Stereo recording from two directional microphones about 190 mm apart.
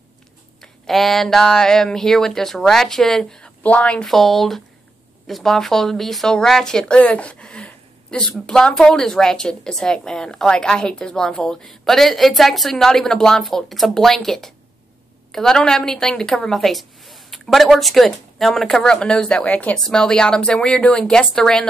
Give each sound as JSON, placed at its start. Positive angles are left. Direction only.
{"t": 0.6, "sound": "a woman's voice", "side_deg": 0}